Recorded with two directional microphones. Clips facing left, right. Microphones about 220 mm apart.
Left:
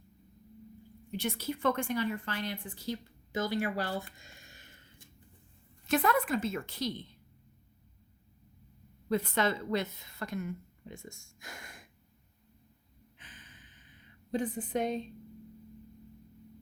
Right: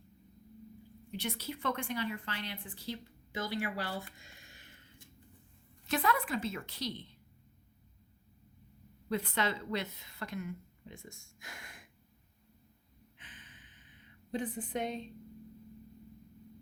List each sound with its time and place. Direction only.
1.1 s a woman's voice: 45° left (ahead or behind)
5.9 s a woman's voice: 45° left (ahead or behind)
9.0 s a woman's voice: 45° left (ahead or behind)
13.1 s a sound: 40° left (ahead or behind)
14.3 s a woman's voice: 40° left (ahead or behind)